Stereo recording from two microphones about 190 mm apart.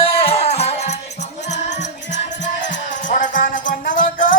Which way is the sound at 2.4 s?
40° left (ahead or behind).